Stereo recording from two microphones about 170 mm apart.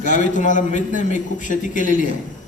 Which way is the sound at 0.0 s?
50° left (ahead or behind).